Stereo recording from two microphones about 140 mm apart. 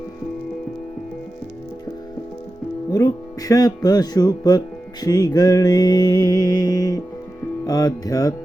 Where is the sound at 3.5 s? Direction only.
25° left (ahead or behind).